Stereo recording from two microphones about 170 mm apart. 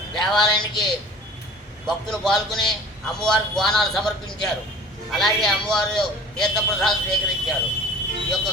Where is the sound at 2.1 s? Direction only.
Centre (ahead or behind).